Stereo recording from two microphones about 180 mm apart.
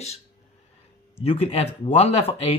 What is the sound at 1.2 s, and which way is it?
Speech, 35° left (ahead or behind).